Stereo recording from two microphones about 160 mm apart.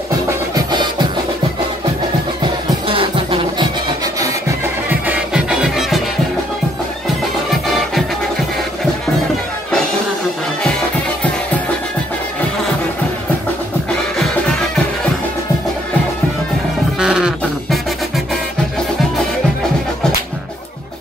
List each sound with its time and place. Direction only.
0.6 s music: 25° right (ahead or behind)
2.9 s music: 30° right (ahead or behind); by 5.9 s 5° right (ahead or behind)
17.0 s music: 5° right (ahead or behind)